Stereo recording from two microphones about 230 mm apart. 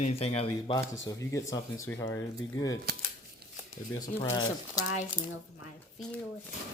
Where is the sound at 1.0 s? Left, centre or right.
Centre.